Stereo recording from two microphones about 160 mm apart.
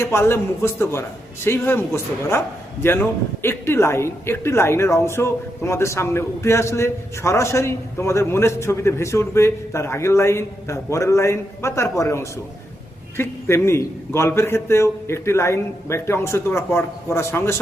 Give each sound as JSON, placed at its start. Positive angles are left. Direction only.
{"t": 0.0, "sound": "speech", "side_deg": 15}